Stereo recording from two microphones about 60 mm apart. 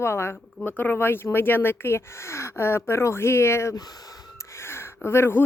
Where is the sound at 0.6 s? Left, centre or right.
Left.